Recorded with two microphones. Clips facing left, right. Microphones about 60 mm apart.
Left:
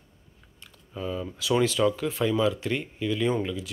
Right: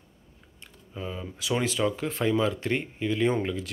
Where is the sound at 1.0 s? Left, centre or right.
Right.